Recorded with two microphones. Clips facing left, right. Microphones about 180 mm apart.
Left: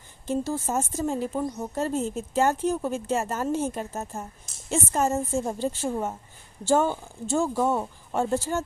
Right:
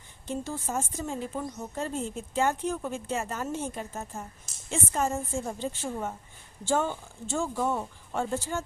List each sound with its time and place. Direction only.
0.3 s a woman's voice: 45° left (ahead or behind)